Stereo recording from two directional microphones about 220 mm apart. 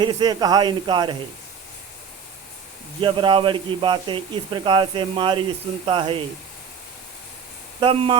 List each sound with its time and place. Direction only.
0.0 s speech: 20° right (ahead or behind)
3.0 s speech: 20° right (ahead or behind)
7.8 s speech: 25° right (ahead or behind)